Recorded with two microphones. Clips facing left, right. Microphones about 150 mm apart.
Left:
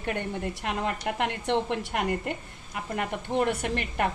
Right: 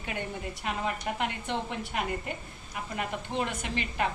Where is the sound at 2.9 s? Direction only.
55° left (ahead or behind).